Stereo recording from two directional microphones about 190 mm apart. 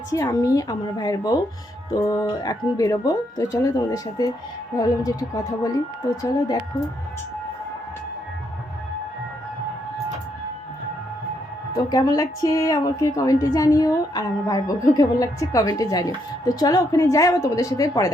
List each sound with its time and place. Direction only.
0.1 s a woman's voice: 15° left (ahead or behind)
11.9 s a woman's voice: 20° left (ahead or behind)